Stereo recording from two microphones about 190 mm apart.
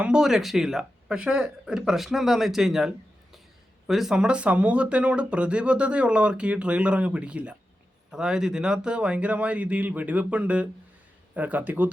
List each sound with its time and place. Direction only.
0.0 s speech: 5° right (ahead or behind)